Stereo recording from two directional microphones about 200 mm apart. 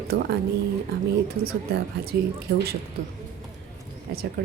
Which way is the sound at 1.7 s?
50° right (ahead or behind).